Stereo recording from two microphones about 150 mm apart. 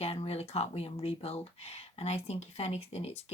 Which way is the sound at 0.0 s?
40° left (ahead or behind).